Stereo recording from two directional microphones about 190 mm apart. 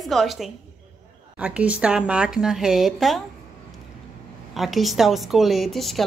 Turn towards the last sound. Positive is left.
turn(degrees=0)  # may be behind; listen again after turning